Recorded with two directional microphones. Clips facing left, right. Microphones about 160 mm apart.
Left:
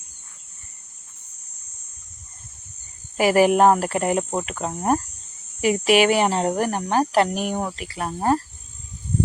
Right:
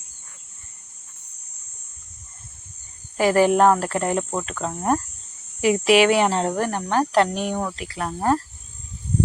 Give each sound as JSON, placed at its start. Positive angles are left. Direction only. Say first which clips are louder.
{"t": 3.2, "sound": "cricket", "louder": "left 1 dB", "side_deg": 10}
{"t": 5.5, "sound": "speech", "louder": "right 1 dB", "side_deg": 0}
{"t": 6.4, "sound": "cricket", "louder": "left 1 dB", "side_deg": 15}
{"t": 7.1, "sound": "speech", "louder": "even", "side_deg": 5}